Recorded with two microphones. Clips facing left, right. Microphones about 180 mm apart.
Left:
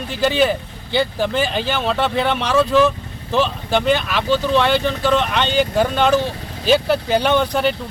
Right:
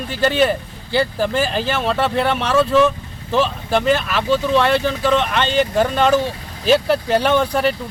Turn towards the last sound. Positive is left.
turn(degrees=0)  # may be behind; listen again after turning